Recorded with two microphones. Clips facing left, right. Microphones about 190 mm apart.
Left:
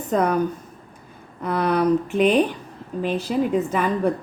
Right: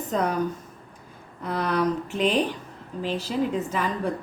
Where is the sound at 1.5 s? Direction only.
55° left (ahead or behind).